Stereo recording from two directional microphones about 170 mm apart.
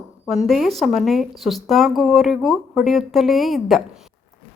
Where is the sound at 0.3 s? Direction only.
Centre (ahead or behind).